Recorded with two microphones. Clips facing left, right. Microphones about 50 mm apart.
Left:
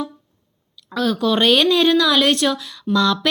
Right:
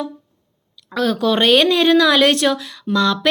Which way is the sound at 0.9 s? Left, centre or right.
Right.